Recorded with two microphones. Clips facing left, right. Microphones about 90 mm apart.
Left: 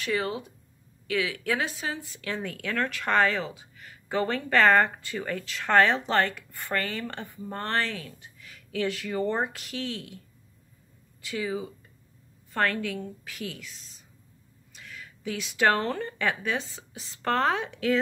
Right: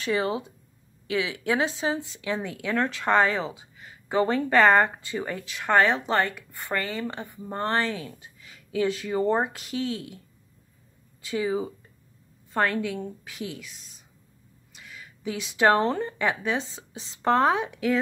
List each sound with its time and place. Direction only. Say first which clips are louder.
0.0 s speech: right 3 dB; 25° right (ahead or behind)
11.2 s speech: right 4 dB; 25° right (ahead or behind)
12.5 s speech: right 2 dB; 20° right (ahead or behind)
14.8 s a woman's voice: even; 15° right (ahead or behind)